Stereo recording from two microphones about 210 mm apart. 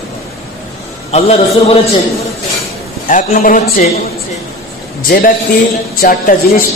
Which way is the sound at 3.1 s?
40° left (ahead or behind).